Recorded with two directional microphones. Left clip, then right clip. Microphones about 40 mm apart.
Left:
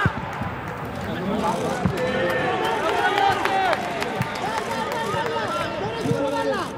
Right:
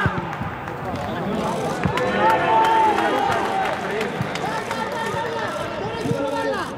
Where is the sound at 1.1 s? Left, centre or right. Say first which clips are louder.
Left 2 dB; right.